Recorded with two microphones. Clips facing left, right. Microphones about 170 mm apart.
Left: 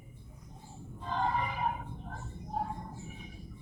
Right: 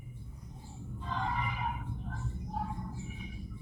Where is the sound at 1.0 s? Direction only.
40° left (ahead or behind).